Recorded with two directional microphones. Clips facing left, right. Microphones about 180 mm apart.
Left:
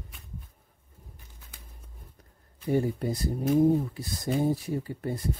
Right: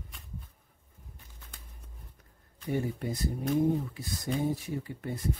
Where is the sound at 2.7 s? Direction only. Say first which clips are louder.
Left 5 dB; 35° left (ahead or behind).